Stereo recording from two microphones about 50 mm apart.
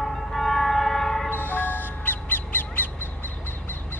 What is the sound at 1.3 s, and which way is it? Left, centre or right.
Crow, left.